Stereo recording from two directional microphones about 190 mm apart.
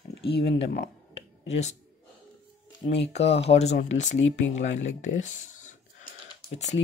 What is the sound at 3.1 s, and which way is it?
Speech, 35° left (ahead or behind).